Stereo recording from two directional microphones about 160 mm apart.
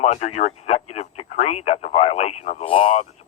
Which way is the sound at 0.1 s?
45° left (ahead or behind).